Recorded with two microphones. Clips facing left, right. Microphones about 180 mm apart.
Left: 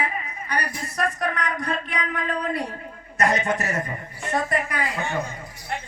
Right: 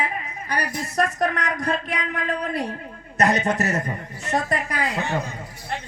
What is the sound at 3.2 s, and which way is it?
Speech, 40° right (ahead or behind).